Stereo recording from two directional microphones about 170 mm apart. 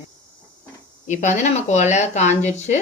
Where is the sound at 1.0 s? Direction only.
45° left (ahead or behind).